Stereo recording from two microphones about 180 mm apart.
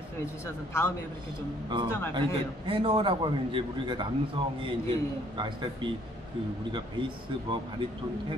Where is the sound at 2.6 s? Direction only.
30° right (ahead or behind).